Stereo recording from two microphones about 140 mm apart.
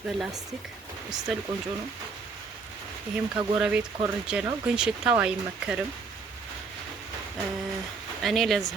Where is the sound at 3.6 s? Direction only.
5° right (ahead or behind).